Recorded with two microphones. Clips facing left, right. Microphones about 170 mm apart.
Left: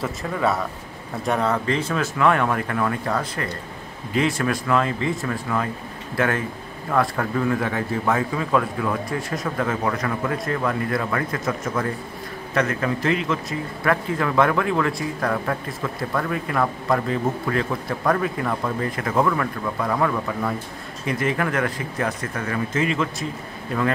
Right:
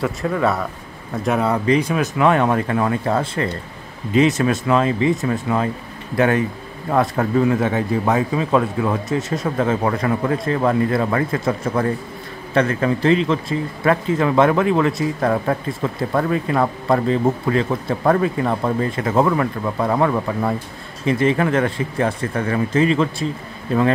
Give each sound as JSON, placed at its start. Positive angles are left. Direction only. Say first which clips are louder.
{"t": 0.0, "sound": "a man's voice", "louder": "right 4 dB", "side_deg": 0}